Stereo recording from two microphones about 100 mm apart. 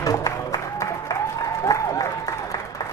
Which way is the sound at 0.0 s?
35° left (ahead or behind).